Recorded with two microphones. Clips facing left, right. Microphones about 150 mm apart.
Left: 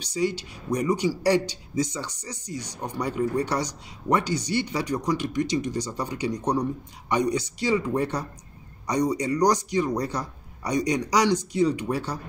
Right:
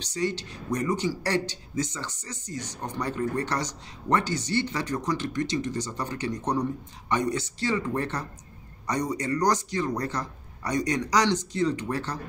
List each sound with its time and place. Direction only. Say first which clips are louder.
0.0 s speech: left 3 dB; 10° left (ahead or behind)